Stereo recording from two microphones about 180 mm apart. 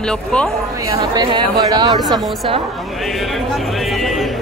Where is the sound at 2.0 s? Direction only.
Centre (ahead or behind).